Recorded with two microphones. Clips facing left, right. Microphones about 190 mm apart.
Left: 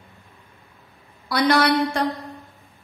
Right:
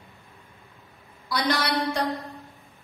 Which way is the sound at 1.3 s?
65° left (ahead or behind).